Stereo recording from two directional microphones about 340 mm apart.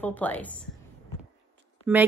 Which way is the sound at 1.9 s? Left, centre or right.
Centre.